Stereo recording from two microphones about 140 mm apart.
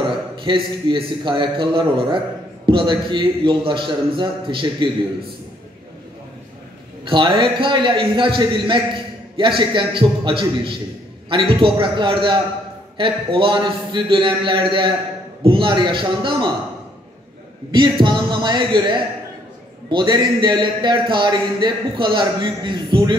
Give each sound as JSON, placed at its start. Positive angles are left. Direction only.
{"t": 0.4, "sound": "a man's voice", "side_deg": -35}
{"t": 7.3, "sound": "a man's voice", "side_deg": -35}
{"t": 17.6, "sound": "a man's voice", "side_deg": -30}